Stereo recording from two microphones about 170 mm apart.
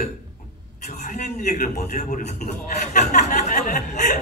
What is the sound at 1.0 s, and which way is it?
A man's voice, 50° left (ahead or behind).